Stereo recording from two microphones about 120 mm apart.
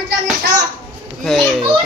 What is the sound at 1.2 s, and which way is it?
Speech, centre (ahead or behind).